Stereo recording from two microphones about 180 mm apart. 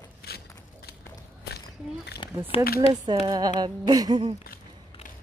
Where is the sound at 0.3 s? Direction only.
60° left (ahead or behind).